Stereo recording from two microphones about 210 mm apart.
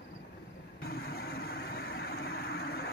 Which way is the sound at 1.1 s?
45° left (ahead or behind).